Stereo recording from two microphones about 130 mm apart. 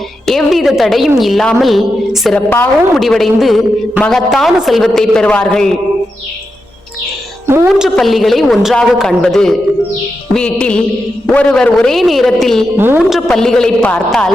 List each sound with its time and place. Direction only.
0.3 s a man's voice: centre (ahead or behind)
7.4 s a woman's voice: 20° right (ahead or behind)
7.9 s a man's voice: centre (ahead or behind)
10.3 s music: 10° left (ahead or behind)
11.3 s a man's voice: 5° left (ahead or behind)
12.7 s speech: 15° right (ahead or behind)
13.0 s a man's voice: centre (ahead or behind)